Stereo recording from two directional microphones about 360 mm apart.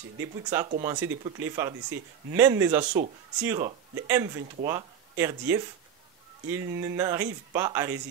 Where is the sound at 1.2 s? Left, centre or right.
Centre.